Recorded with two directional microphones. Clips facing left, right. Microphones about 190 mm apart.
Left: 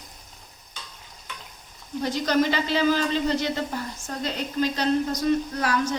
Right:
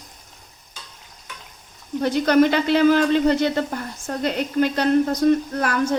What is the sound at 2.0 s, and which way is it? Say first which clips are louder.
A woman's voice: right 6 dB; 60° right (ahead or behind).